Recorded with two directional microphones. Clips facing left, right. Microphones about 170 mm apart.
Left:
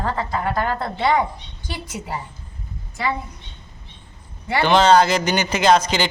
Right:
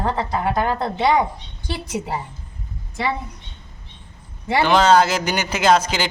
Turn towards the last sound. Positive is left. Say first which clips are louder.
# left 1 dB
turn(degrees=-5)  # may be behind; listen again after turning